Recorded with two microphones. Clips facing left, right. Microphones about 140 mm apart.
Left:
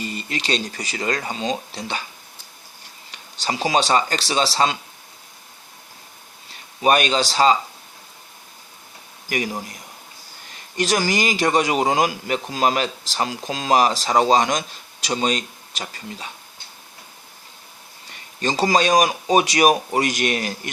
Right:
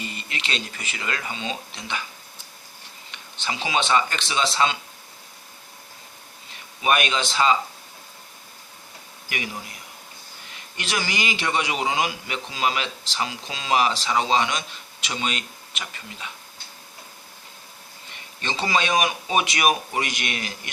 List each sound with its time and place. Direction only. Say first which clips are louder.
0.0 s speech: left 6 dB; 40° left (ahead or behind)
3.1 s speech: left 4 dB; 35° left (ahead or behind)
6.8 s speech: left 5 dB; 35° left (ahead or behind)
9.3 s speech: left 7 dB; 40° left (ahead or behind)
10.8 s a man's voice: left 7 dB; 40° left (ahead or behind)
18.3 s speech: left 6 dB; 40° left (ahead or behind)